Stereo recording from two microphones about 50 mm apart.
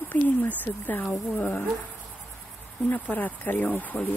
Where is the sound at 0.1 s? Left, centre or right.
Left.